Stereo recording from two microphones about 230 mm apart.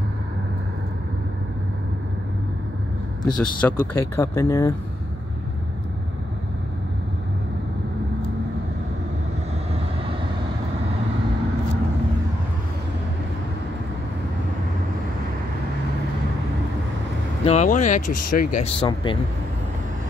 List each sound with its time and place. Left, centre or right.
3.3 s speech: centre
17.5 s speech: left